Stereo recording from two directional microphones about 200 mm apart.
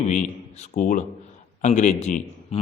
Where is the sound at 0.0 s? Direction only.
35° left (ahead or behind).